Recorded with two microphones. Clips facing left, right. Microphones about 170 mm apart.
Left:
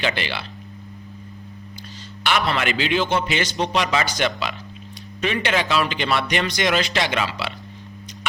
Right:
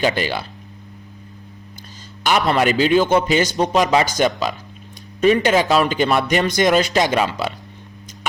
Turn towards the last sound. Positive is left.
turn(degrees=-45)  # may be behind; listen again after turning